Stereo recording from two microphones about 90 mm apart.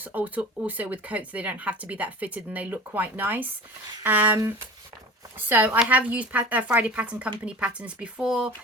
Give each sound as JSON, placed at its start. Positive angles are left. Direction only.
{"t": 0.0, "sound": "speech", "side_deg": -20}
{"t": 5.5, "sound": "speech", "side_deg": -20}